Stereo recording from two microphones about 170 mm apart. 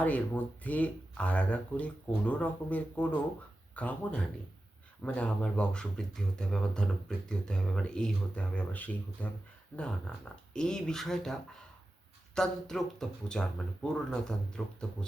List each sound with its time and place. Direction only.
0.0 s speech: 10° left (ahead or behind)